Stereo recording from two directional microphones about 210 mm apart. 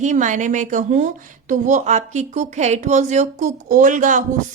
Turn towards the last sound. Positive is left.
turn(degrees=-40)  # may be behind; listen again after turning